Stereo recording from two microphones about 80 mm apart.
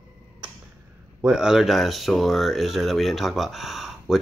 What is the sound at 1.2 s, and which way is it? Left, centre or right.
Speech, centre.